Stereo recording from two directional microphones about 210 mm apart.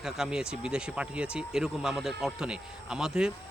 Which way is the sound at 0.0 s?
5° right (ahead or behind).